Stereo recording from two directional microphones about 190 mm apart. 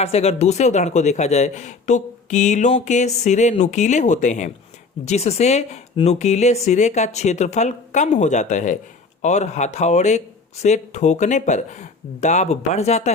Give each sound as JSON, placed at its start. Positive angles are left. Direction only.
{"t": 0.0, "sound": "speech", "side_deg": 35}